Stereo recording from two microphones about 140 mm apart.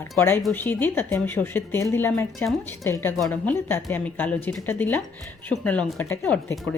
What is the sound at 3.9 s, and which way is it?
A woman's voice, 10° left (ahead or behind).